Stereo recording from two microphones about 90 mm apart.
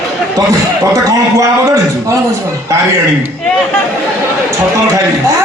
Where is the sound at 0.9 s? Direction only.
40° right (ahead or behind).